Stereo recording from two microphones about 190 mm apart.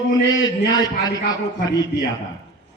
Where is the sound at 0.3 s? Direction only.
20° left (ahead or behind).